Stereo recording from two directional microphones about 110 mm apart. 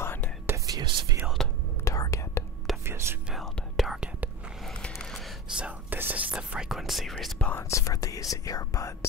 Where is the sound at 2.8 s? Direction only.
25° right (ahead or behind).